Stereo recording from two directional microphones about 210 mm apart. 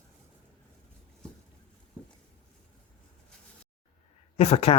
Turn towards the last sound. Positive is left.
turn(degrees=30)  # may be behind; listen again after turning